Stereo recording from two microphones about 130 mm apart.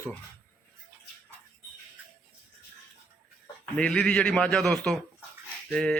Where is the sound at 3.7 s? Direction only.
5° left (ahead or behind).